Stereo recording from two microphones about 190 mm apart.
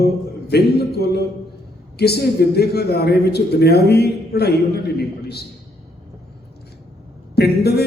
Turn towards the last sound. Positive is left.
turn(degrees=55)  # may be behind; listen again after turning